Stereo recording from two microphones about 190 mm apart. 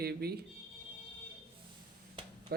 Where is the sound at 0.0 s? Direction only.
55° right (ahead or behind).